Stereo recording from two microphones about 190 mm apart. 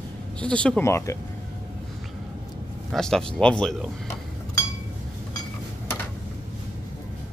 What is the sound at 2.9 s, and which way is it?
Speech, 5° left (ahead or behind).